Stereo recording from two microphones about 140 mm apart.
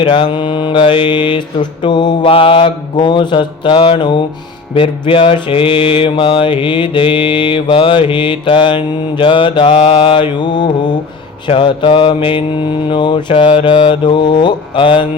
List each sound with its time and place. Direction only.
0.0 s mantra: 35° left (ahead or behind)